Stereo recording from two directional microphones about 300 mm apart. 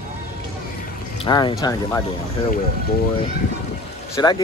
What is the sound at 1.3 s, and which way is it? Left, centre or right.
Speech, centre.